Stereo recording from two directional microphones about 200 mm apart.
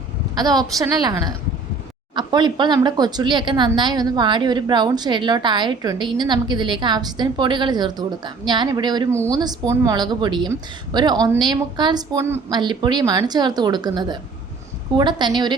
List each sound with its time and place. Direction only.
0.3 s a woman's voice: 20° right (ahead or behind)